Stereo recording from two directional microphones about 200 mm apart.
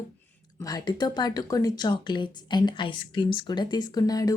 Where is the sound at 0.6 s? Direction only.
20° left (ahead or behind).